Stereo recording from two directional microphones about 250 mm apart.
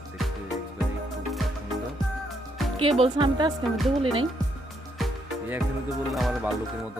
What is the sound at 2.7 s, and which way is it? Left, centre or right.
Music, right.